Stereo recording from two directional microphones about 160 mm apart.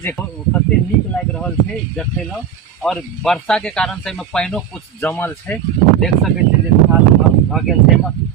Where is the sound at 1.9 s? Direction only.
5° left (ahead or behind).